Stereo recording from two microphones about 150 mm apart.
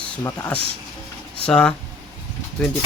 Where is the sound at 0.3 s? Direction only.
10° left (ahead or behind).